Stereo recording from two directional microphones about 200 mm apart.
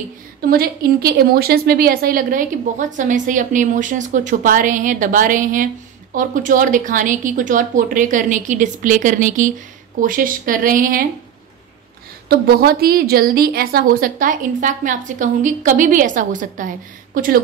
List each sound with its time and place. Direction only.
0.5 s a woman's voice: 50° right (ahead or behind)
12.3 s a woman's voice: 50° right (ahead or behind)